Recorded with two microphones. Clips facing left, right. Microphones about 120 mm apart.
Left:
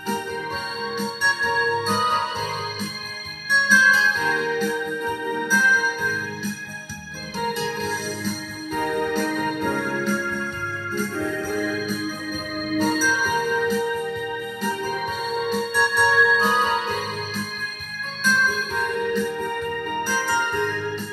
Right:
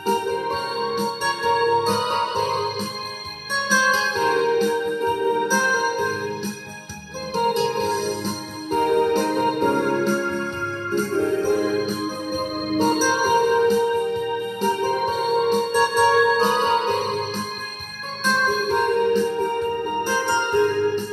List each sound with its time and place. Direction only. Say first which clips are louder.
0.0 s music: right 5 dB; 35° right (ahead or behind)
2.0 s music: right 2 dB; 50° right (ahead or behind)
3.7 s music: even; 35° right (ahead or behind)
16.1 s music: right 3 dB; 40° right (ahead or behind)
16.6 s music: right 4 dB; 30° right (ahead or behind)
18.8 s music: right 4 dB; 30° right (ahead or behind)